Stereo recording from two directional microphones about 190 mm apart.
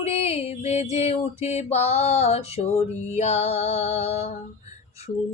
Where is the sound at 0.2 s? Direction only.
35° left (ahead or behind).